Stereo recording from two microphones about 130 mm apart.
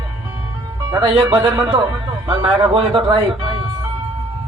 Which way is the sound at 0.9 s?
35° right (ahead or behind).